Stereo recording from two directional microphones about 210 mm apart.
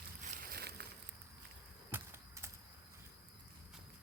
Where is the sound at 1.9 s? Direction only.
15° right (ahead or behind).